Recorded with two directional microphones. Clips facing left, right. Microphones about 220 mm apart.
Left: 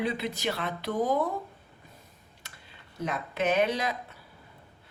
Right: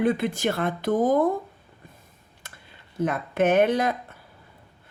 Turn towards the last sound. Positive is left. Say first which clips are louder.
# right 7 dB
turn(degrees=-50)  # may be behind; listen again after turning